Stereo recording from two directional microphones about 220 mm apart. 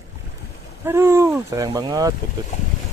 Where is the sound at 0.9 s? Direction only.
10° right (ahead or behind).